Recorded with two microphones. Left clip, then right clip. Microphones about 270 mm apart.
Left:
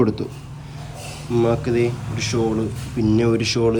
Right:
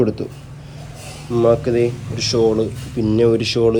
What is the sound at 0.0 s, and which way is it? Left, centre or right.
Speech, centre.